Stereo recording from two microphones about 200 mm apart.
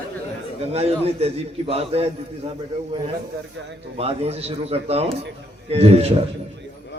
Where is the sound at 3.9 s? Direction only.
30° right (ahead or behind).